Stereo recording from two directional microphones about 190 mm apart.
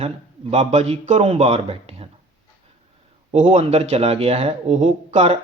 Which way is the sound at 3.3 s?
35° right (ahead or behind).